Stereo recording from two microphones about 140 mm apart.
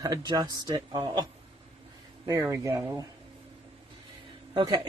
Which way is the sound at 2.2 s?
25° right (ahead or behind).